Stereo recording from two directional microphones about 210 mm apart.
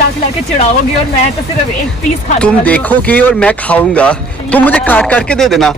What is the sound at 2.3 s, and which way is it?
Speech, 5° left (ahead or behind).